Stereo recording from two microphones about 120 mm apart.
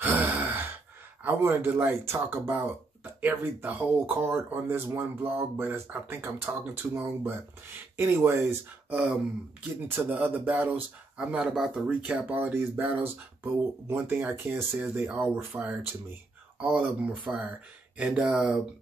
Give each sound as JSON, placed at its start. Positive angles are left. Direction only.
{"t": 0.0, "sound": "sigh", "side_deg": -15}
{"t": 1.2, "sound": "speech", "side_deg": -20}
{"t": 17.3, "sound": "speech", "side_deg": -5}